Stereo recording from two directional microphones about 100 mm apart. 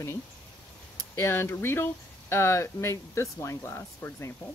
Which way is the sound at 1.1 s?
25° left (ahead or behind).